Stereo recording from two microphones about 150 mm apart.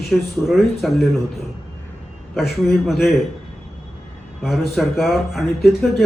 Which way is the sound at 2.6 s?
Centre (ahead or behind).